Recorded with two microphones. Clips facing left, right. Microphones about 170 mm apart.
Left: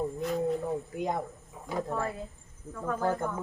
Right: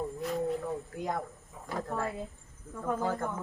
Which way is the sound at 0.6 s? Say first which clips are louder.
Left 3 dB; 20° left (ahead or behind).